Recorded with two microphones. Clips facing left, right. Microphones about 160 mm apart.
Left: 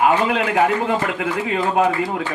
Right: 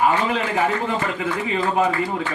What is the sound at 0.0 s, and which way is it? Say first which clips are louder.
A man's voice: left 3 dB; 80° left.